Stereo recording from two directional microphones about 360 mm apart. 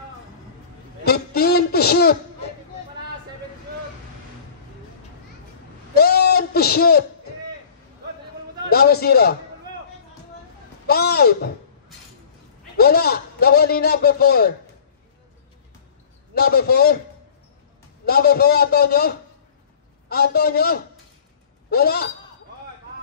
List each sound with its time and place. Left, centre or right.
1.0 s a sound: left
5.9 s a sound: left
8.6 s a man's voice: left
10.9 s a man's voice: left
12.7 s a man's voice: left
16.3 s a man's voice: left
18.0 s a man's voice: left